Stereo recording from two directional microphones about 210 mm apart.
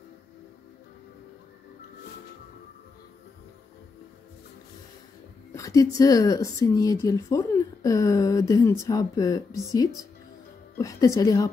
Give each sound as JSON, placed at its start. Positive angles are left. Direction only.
{"t": 5.5, "sound": "speech", "side_deg": 15}
{"t": 10.8, "sound": "speech", "side_deg": 15}